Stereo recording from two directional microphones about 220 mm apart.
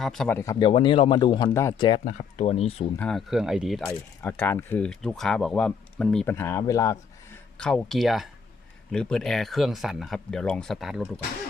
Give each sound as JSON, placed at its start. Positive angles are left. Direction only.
{"t": 0.0, "sound": "speech", "side_deg": 0}
{"t": 2.0, "sound": "speech", "side_deg": 30}
{"t": 3.0, "sound": "speech", "side_deg": 0}
{"t": 7.6, "sound": "speech", "side_deg": 5}